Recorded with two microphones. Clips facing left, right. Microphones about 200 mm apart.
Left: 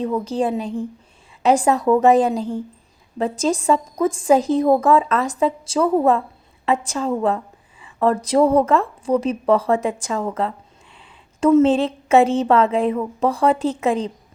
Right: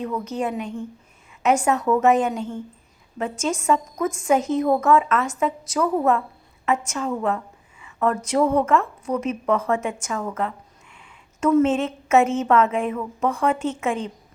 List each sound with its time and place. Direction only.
0.0 s a woman's voice: 30° left (ahead or behind)